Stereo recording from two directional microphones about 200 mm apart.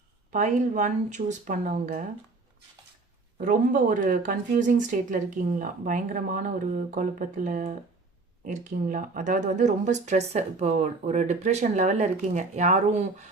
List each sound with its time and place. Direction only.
0.3 s speech: 35° right (ahead or behind)
3.3 s speech: 40° right (ahead or behind)